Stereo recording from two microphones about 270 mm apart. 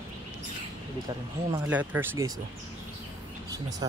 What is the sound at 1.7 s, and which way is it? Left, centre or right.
Speech, centre.